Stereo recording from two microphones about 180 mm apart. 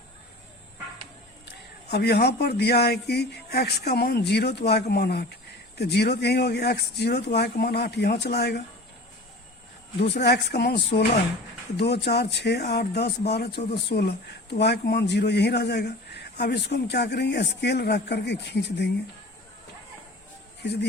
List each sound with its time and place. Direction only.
1.5 s speech: 65° left (ahead or behind)
10.0 s speech: 70° left (ahead or behind)